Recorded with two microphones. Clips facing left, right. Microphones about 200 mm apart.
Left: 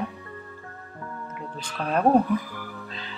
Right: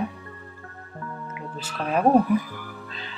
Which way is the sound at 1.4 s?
5° right (ahead or behind).